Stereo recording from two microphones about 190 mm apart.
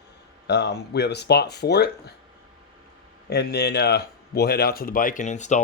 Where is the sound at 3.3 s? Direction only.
60° left (ahead or behind).